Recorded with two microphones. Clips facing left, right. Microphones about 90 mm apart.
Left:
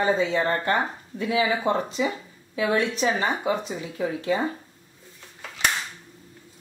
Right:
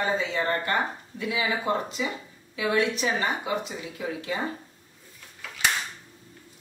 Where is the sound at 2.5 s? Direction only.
30° left (ahead or behind).